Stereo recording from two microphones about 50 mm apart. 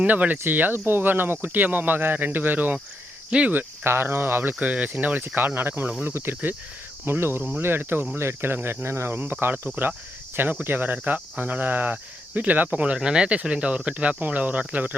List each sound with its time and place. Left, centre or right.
0.0 s speech: right
3.2 s cricket: right
3.5 s speech: right
4.6 s speech: right
13.0 s speech: centre; by 14.9 s right